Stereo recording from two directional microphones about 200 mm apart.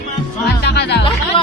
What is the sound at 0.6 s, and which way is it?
Music, 55° left (ahead or behind).